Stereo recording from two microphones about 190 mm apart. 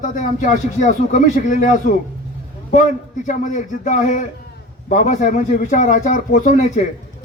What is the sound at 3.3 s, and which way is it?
A man's voice, 40° left (ahead or behind).